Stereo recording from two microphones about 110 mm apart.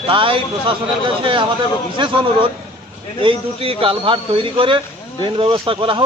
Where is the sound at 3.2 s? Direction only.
55° right (ahead or behind).